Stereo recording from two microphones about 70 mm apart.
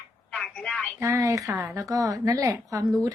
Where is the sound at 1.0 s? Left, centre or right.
Right.